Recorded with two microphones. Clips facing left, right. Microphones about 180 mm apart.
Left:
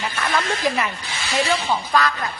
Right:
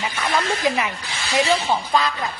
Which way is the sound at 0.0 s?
15° right (ahead or behind).